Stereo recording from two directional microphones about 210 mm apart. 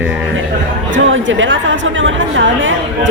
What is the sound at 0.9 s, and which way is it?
A man's voice, 65° right (ahead or behind).